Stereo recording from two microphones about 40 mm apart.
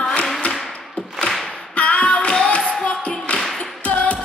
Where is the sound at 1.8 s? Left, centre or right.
Left.